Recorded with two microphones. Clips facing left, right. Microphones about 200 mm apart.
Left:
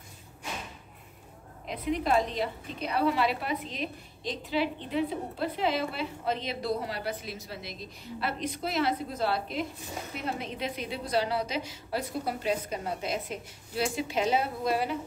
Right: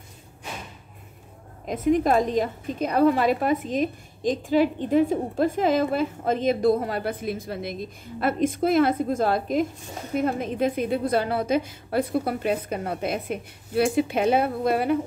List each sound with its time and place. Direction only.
1.7 s a woman's voice: 45° right (ahead or behind)